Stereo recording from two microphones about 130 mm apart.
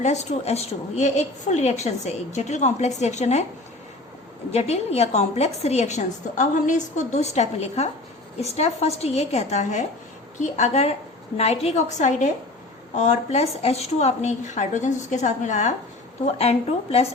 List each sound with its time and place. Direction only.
0.0 s a woman's voice: 60° left (ahead or behind)
4.5 s a woman's voice: 55° left (ahead or behind)
16.2 s speech: 50° left (ahead or behind)